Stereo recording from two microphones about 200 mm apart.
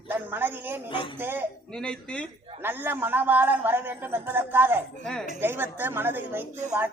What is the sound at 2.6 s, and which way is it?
A man's voice, 10° right (ahead or behind).